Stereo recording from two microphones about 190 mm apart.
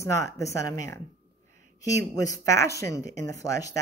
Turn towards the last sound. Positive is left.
turn(degrees=15)  # may be behind; listen again after turning